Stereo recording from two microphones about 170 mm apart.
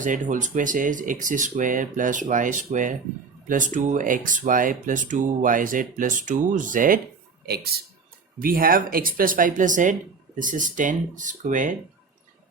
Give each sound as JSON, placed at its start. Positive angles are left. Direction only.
{"t": 0.0, "sound": "speech", "side_deg": -50}
{"t": 7.4, "sound": "speech", "side_deg": -70}
{"t": 8.4, "sound": "speech", "side_deg": -55}